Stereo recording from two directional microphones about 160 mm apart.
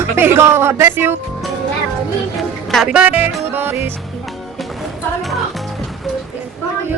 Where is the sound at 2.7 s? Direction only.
5° right (ahead or behind).